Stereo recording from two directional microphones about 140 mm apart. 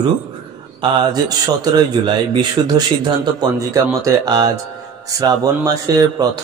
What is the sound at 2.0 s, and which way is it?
Speech, 35° right (ahead or behind).